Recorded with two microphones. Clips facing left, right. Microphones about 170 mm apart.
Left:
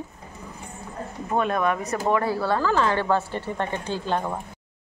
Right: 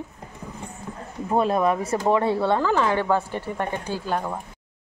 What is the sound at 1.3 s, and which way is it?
Speech, 30° right (ahead or behind).